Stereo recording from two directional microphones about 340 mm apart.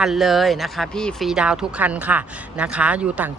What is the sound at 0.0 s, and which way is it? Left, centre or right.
Speech, centre.